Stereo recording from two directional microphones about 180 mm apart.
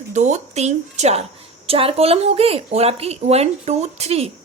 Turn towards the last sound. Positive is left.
turn(degrees=-35)  # may be behind; listen again after turning